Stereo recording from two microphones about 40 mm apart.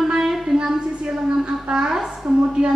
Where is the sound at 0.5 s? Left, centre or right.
Right.